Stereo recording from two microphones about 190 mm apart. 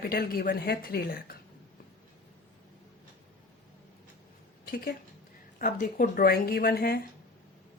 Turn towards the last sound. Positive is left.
turn(degrees=55)  # may be behind; listen again after turning